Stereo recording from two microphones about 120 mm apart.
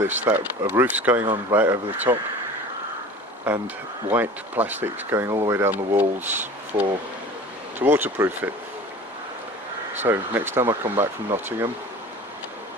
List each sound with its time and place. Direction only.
0.3 s speech: 15° right (ahead or behind)
3.5 s speech: 10° right (ahead or behind)
10.0 s speech: 15° right (ahead or behind)